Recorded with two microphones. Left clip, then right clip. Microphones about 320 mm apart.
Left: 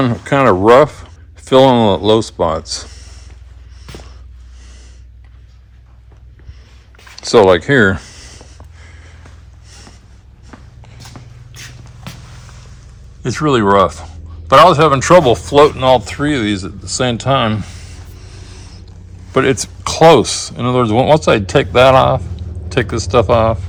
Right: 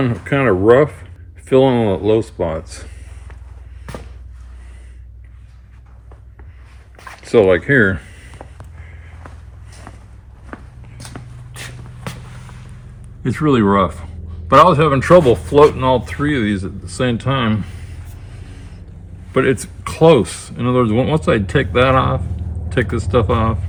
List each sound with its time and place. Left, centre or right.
0.3 s speech: centre
7.2 s speech: centre
13.2 s speech: centre
19.3 s speech: centre